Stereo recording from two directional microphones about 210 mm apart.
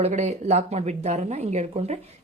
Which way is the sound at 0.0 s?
30° right (ahead or behind).